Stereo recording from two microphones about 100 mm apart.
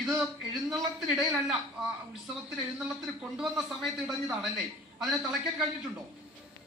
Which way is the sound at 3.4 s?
Centre (ahead or behind).